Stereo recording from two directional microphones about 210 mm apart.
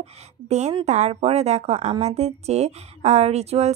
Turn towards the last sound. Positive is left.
turn(degrees=-30)  # may be behind; listen again after turning